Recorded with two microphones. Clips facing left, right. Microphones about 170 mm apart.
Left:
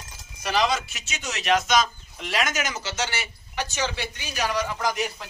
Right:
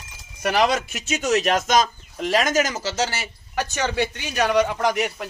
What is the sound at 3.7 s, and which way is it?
Speech, 55° right (ahead or behind).